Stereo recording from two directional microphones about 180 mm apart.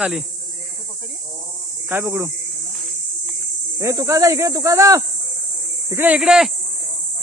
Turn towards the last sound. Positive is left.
turn(degrees=0)  # may be behind; listen again after turning